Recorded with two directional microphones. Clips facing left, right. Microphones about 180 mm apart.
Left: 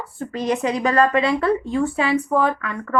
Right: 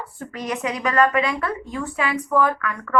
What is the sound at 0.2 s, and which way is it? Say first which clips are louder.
Speech: left 6 dB; 30° left (ahead or behind).